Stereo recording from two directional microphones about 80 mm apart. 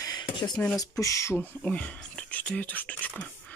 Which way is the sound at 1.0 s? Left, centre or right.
Left.